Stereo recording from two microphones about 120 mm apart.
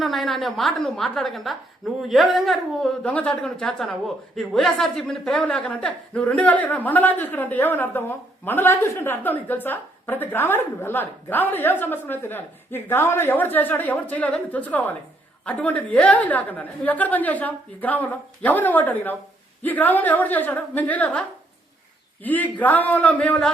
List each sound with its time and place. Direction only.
0.0 s a woman's voice: centre (ahead or behind)